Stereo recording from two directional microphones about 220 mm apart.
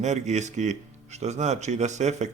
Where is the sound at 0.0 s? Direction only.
30° right (ahead or behind).